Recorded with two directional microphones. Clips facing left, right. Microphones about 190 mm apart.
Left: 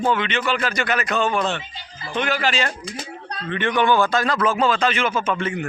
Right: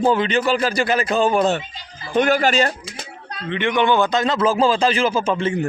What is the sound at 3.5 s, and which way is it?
A man's voice, 15° right (ahead or behind).